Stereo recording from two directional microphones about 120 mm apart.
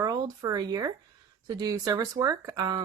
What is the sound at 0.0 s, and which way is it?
Speech, 35° right (ahead or behind).